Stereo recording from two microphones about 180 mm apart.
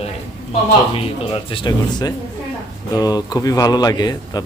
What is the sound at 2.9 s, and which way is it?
Speech, 20° left (ahead or behind).